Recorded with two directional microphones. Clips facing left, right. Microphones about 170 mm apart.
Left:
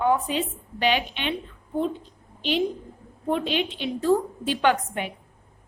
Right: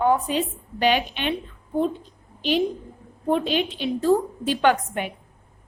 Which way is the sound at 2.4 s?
45° right (ahead or behind).